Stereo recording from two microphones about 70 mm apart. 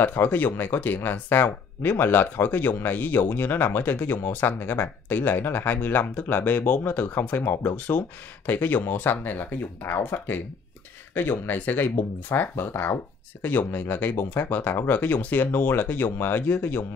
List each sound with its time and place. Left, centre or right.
0.0 s speech: left